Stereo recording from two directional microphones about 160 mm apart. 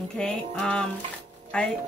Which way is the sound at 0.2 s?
5° left (ahead or behind).